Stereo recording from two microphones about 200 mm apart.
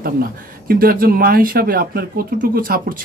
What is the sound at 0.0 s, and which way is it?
Speech, 45° right (ahead or behind).